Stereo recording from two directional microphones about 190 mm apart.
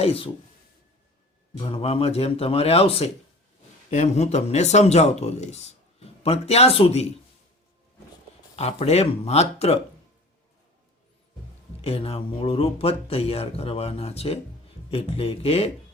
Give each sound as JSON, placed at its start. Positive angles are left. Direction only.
{"t": 0.0, "sound": "speech", "side_deg": 30}
{"t": 1.5, "sound": "speech", "side_deg": 30}
{"t": 8.5, "sound": "speech", "side_deg": 35}
{"t": 11.8, "sound": "speech", "side_deg": 30}